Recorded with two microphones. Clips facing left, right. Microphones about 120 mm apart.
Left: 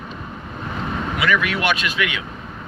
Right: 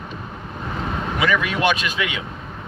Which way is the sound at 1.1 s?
25° right (ahead or behind).